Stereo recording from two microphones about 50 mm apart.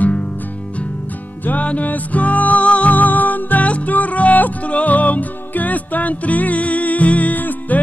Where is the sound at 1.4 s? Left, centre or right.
Left.